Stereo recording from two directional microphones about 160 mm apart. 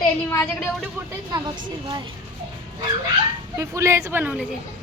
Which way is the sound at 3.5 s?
20° right (ahead or behind).